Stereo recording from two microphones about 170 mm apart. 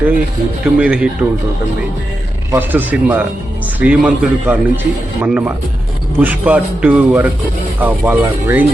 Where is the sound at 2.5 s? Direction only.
10° right (ahead or behind).